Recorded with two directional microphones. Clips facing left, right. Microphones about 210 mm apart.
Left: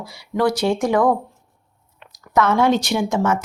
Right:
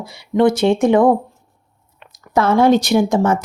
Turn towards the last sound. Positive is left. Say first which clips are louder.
# right 5 dB
turn(degrees=-35)  # may be behind; listen again after turning